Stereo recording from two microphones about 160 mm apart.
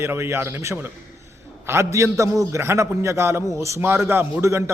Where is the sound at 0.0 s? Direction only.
15° right (ahead or behind).